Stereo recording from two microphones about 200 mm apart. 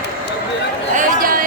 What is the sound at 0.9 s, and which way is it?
Chatter, 40° right (ahead or behind).